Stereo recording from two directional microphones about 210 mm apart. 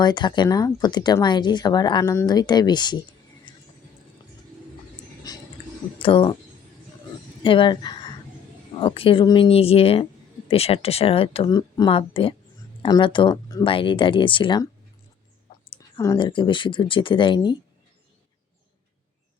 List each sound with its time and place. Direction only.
0.0 s speech: 20° left (ahead or behind)
3.5 s a sound: 20° left (ahead or behind)
6.0 s speech: 25° left (ahead or behind)
7.4 s speech: 25° left (ahead or behind)
16.0 s speech: 20° left (ahead or behind)